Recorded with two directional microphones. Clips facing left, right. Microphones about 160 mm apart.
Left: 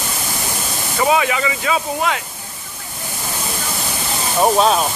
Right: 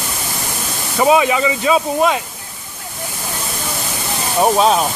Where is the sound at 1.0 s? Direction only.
25° right (ahead or behind).